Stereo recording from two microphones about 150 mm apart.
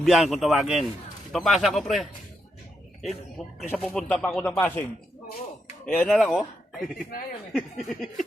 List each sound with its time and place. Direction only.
0.0 s speech: centre (ahead or behind)
3.1 s speech: centre (ahead or behind)